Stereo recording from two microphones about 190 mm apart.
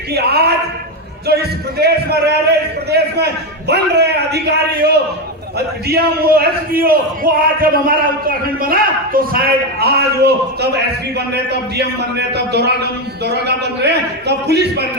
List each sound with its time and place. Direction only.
0.1 s a man's voice: 55° right (ahead or behind)
11.8 s a man's voice: 60° right (ahead or behind)